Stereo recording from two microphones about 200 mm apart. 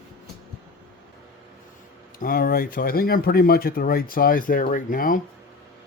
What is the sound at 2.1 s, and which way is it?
Speech, 45° left (ahead or behind).